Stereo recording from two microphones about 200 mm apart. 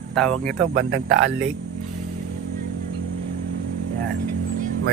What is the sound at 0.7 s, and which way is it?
Speech, 65° right (ahead or behind).